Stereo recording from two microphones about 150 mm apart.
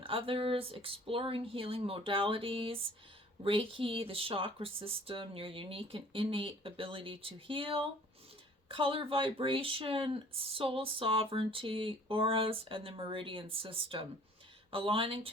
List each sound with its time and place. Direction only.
0.0 s speech: 35° right (ahead or behind)